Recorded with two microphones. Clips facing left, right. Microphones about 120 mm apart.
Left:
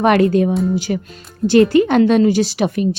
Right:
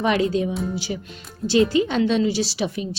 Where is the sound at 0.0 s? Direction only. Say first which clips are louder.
Left 7 dB; 60° left (ahead or behind).